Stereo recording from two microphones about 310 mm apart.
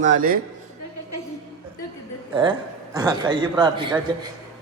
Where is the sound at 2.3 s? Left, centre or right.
Centre.